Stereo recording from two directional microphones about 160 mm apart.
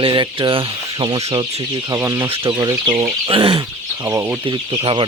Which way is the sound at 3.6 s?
20° right (ahead or behind).